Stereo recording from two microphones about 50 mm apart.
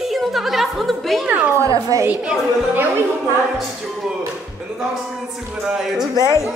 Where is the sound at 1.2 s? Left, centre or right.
Right.